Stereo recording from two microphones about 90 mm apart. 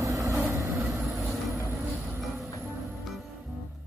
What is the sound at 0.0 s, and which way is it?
Vehicle, 40° right (ahead or behind).